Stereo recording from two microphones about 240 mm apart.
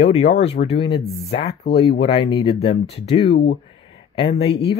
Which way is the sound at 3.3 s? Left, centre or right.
Left.